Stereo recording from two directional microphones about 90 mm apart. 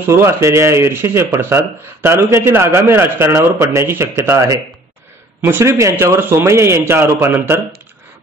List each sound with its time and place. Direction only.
0.0 s a man's voice: 30° right (ahead or behind)